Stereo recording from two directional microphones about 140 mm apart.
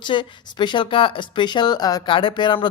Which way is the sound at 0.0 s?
35° left (ahead or behind).